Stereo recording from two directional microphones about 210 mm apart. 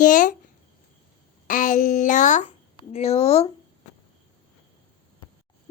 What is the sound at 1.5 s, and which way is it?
A child's voice, 40° left (ahead or behind).